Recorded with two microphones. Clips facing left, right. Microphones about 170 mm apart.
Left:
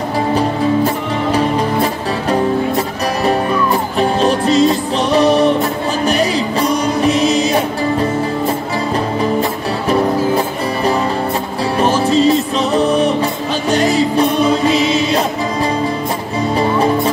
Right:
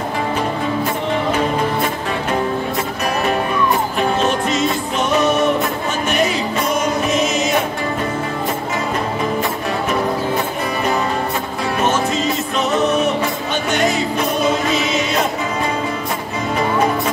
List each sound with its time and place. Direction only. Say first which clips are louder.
4.0 s music: left 6 dB; 35° left (ahead or behind)
9.4 s music: left 2 dB; 35° left (ahead or behind)
11.8 s music: left 7 dB; 35° left (ahead or behind)
16.5 s music: left 3 dB; 30° left (ahead or behind)